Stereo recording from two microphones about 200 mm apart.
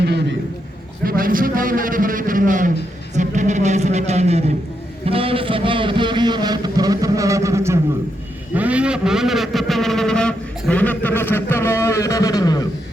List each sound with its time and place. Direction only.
0.0 s a man's voice: 55° right (ahead or behind)
1.0 s a man's voice: 45° right (ahead or behind); by 12.6 s 20° left (ahead or behind)